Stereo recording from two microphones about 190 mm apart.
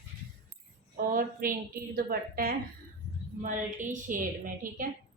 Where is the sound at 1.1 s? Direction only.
45° right (ahead or behind).